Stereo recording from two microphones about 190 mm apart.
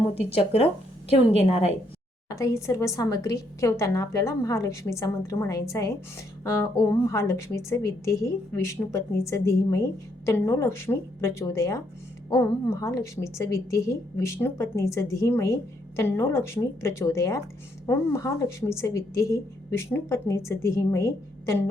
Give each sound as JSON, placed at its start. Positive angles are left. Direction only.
{"t": 2.3, "sound": "a woman's voice", "side_deg": 15}